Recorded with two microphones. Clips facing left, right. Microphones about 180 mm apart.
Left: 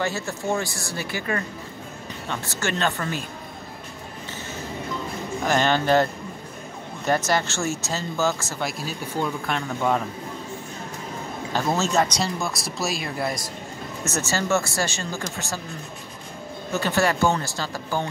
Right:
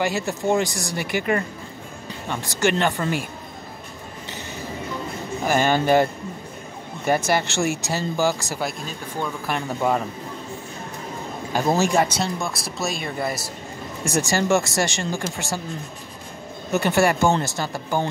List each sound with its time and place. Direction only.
0.0 s speech: 15° right (ahead or behind)
5.4 s speech: 10° right (ahead or behind)
7.1 s speech: 10° right (ahead or behind)
8.6 s speech: 5° left (ahead or behind)
9.5 s speech: 5° right (ahead or behind)
11.8 s speech: 10° right (ahead or behind)
14.0 s speech: 15° right (ahead or behind)
16.7 s speech: 15° right (ahead or behind)